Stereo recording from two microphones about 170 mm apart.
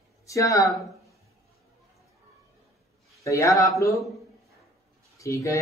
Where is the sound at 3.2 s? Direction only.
20° left (ahead or behind).